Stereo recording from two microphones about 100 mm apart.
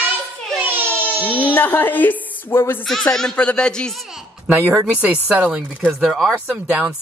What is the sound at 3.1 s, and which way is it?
Speech, 10° left (ahead or behind).